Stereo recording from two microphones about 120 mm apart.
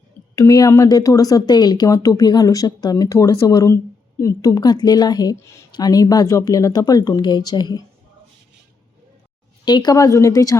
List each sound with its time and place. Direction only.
0.3 s a woman's voice: 30° left (ahead or behind)
9.6 s speech: 35° left (ahead or behind)